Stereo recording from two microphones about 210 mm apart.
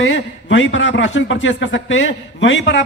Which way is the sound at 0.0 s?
65° left (ahead or behind).